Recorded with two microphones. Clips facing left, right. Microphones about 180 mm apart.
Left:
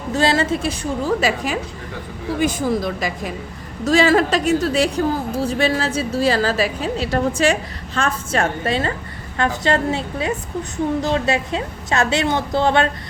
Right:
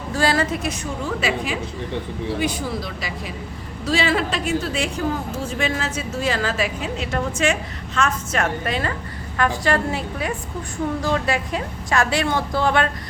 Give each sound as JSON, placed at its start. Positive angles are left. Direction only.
{"t": 0.1, "sound": "a woman's voice", "side_deg": 25}